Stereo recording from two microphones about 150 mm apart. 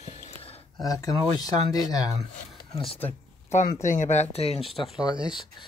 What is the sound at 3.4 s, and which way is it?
Speech, 55° left (ahead or behind).